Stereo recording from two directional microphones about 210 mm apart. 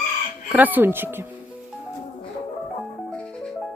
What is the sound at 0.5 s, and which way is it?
Speech, 10° right (ahead or behind).